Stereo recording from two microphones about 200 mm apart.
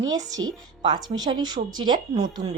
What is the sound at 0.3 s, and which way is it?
Speech, 20° right (ahead or behind).